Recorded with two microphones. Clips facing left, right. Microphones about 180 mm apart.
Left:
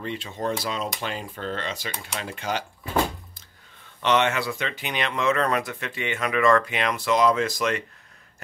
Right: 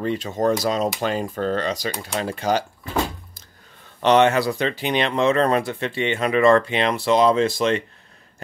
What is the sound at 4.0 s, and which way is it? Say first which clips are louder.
Speech: right 6 dB; 35° right (ahead or behind).